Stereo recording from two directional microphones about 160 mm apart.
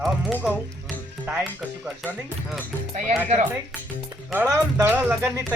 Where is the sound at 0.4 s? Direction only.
Centre (ahead or behind).